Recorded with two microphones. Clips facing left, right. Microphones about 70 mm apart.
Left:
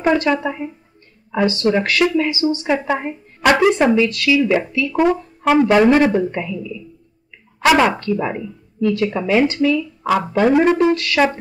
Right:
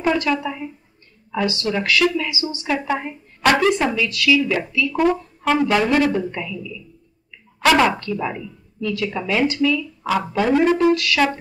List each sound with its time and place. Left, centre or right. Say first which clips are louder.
0.0 s a woman's voice: left 3 dB; left
4.9 s speech: left 3 dB; centre